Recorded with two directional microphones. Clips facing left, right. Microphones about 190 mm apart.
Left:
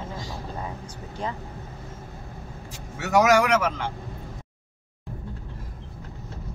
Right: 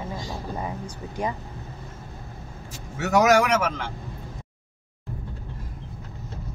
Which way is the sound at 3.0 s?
50° right (ahead or behind).